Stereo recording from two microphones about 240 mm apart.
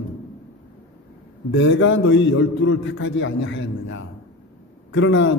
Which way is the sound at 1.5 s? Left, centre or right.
Left.